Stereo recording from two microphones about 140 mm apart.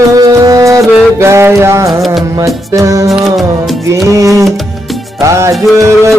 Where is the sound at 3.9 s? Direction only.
20° right (ahead or behind).